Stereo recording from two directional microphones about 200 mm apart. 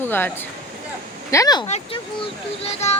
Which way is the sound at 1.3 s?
20° left (ahead or behind).